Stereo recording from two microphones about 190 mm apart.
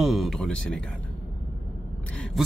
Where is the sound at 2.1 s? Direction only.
5° left (ahead or behind).